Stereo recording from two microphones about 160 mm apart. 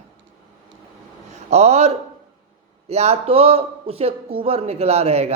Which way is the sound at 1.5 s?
40° right (ahead or behind).